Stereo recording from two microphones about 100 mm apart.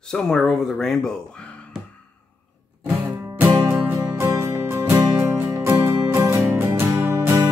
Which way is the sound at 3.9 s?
25° right (ahead or behind).